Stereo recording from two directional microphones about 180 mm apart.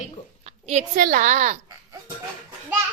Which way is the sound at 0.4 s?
40° right (ahead or behind).